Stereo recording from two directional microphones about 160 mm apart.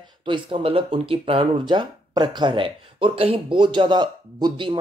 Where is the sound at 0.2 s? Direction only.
30° right (ahead or behind).